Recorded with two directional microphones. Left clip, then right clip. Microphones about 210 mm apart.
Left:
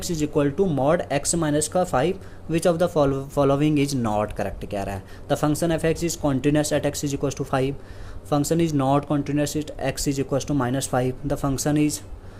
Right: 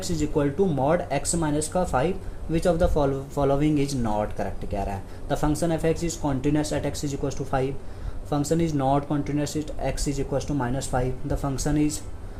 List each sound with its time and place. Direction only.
0.0 s speech: 30° left (ahead or behind)